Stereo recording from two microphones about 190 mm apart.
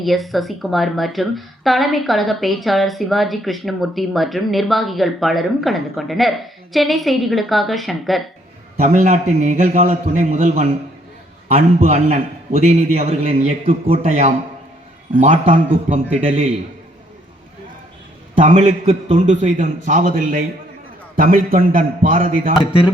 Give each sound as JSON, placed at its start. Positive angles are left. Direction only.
{"t": 0.0, "sound": "speech", "side_deg": 0}
{"t": 8.8, "sound": "a man's voice", "side_deg": -40}
{"t": 15.5, "sound": "a man's voice", "side_deg": -40}
{"t": 18.3, "sound": "a man's voice", "side_deg": -40}